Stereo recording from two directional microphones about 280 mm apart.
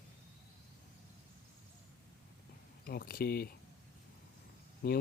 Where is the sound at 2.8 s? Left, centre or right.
Left.